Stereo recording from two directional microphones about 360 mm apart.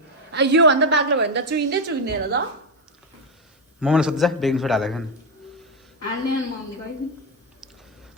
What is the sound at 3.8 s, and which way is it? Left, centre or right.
A man's voice, centre.